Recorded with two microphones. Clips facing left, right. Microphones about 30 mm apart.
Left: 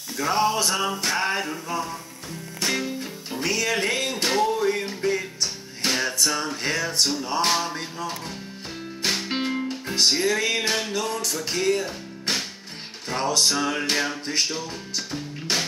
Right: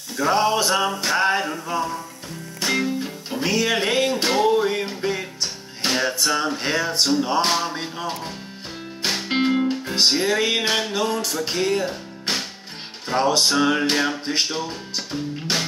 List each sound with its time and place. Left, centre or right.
0.2 s music: centre
0.9 s a sound: centre
3.0 s music: centre
4.4 s music: right
7.4 s a sound: centre
9.0 s music: centre